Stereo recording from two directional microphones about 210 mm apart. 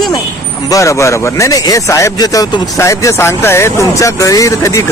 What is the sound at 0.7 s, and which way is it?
Speech, 15° left (ahead or behind).